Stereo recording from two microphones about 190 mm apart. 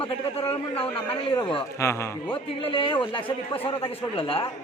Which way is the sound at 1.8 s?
15° left (ahead or behind).